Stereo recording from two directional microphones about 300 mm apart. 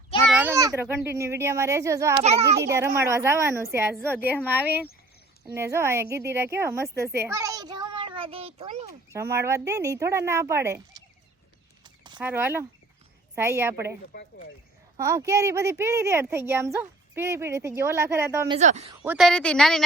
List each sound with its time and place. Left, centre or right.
0.3 s speech: centre
9.3 s speech: centre
11.8 s a sound: centre
13.3 s speech: centre
14.1 s speech: left
14.9 s speech: centre
19.0 s a woman's voice: centre